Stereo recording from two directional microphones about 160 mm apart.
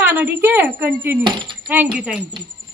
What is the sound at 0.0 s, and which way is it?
Speech, 10° right (ahead or behind).